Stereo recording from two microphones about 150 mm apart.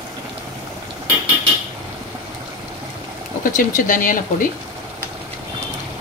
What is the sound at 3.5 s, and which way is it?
Speech, 60° left (ahead or behind).